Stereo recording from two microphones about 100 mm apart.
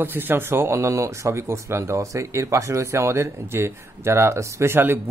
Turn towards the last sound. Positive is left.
turn(degrees=-25)  # may be behind; listen again after turning